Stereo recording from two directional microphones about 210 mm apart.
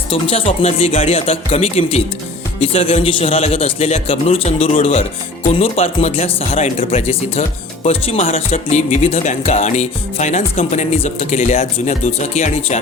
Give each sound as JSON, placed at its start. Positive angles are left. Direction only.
{"t": 0.1, "sound": "a man's voice", "side_deg": 25}